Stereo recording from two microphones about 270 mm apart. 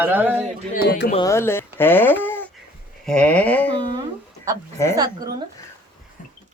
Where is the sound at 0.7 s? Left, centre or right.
Left.